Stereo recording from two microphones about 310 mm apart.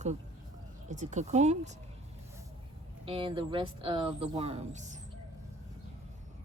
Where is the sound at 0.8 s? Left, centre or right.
Right.